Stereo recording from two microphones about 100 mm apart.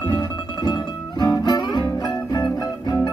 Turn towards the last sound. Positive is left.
turn(degrees=45)  # may be behind; listen again after turning